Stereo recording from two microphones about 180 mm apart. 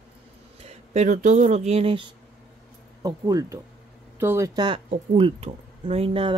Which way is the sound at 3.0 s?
20° right (ahead or behind).